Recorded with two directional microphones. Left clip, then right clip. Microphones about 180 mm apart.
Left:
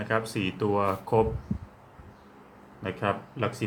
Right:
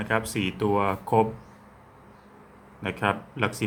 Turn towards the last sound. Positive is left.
turn(degrees=-25)  # may be behind; listen again after turning